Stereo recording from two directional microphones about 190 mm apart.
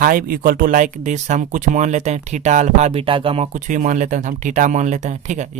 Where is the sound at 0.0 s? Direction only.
45° right (ahead or behind).